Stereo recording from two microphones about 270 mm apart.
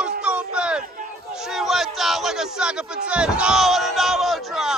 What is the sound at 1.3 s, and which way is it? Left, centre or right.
A man's voice, centre.